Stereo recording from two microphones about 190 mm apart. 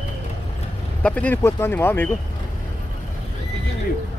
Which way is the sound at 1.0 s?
10° left (ahead or behind).